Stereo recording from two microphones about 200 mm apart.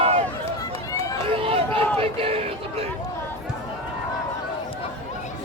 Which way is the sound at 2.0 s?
30° right (ahead or behind).